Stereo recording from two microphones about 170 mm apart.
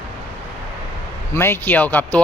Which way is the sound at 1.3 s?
15° left (ahead or behind).